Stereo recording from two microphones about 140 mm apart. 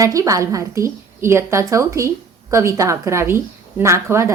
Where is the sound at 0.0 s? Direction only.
25° right (ahead or behind).